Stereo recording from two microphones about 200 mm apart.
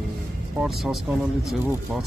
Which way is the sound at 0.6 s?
Centre (ahead or behind).